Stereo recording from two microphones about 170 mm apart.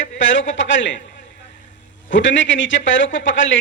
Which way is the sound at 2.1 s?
90° left.